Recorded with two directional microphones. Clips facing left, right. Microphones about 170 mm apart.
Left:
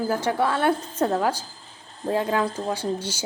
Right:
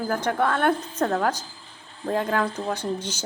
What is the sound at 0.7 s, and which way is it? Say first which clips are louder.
Speech: even; 35° left (ahead or behind).